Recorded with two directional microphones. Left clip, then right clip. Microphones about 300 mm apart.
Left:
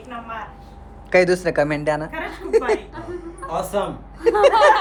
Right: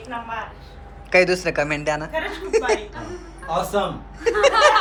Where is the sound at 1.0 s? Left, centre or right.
Centre.